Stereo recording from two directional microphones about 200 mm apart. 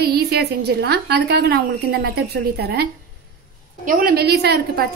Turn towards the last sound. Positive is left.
turn(degrees=-55)  # may be behind; listen again after turning